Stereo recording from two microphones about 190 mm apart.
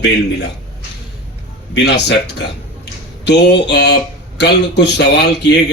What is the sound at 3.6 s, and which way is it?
Speech, 65° left (ahead or behind).